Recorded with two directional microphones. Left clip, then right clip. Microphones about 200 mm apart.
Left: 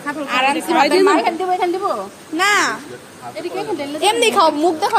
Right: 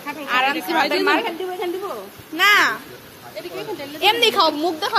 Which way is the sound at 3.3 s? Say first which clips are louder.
Left 6 dB; 55° left (ahead or behind).